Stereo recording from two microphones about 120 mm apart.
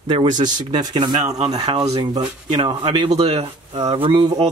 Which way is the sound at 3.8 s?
45° right (ahead or behind).